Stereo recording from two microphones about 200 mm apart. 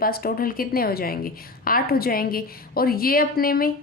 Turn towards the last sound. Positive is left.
turn(degrees=45)  # may be behind; listen again after turning